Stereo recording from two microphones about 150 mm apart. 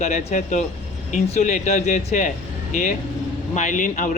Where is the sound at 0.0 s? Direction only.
50° left (ahead or behind).